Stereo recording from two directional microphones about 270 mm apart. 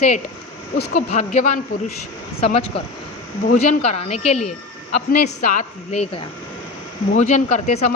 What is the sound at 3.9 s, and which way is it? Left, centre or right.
Speech, left.